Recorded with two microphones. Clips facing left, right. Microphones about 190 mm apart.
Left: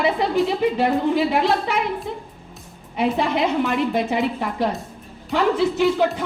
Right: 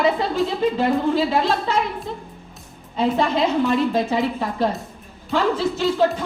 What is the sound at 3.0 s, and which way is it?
A woman's voice, 15° left (ahead or behind).